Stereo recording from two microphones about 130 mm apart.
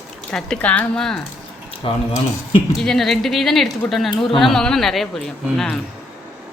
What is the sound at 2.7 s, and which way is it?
A man's voice, 5° left (ahead or behind).